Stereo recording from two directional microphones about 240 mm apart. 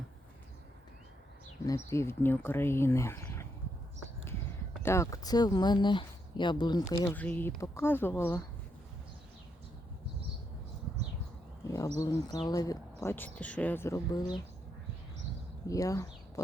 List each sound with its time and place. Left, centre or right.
1.6 s speech: centre
4.8 s speech: centre
11.9 s speech: centre
15.6 s speech: centre